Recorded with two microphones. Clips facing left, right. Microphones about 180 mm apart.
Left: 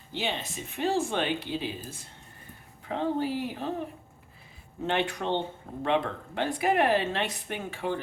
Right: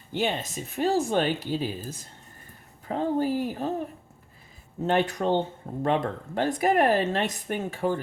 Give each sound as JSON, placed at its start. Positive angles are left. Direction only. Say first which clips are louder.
{"t": 0.1, "sound": "speech", "louder": "right 5 dB", "side_deg": -50}
{"t": 4.9, "sound": "speech", "louder": "right 5 dB", "side_deg": -40}